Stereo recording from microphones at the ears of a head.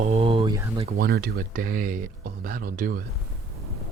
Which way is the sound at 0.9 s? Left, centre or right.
Right.